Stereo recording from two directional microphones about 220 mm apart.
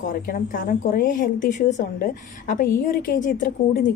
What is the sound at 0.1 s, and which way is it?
A woman's voice, 40° left (ahead or behind).